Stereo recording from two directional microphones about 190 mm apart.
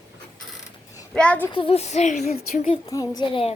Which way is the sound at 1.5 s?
30° left (ahead or behind).